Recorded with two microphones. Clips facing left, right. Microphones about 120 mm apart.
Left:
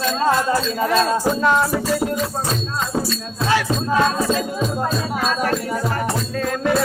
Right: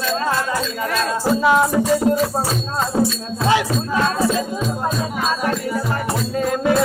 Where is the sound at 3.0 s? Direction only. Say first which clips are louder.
Right 5 dB; 15° right (ahead or behind).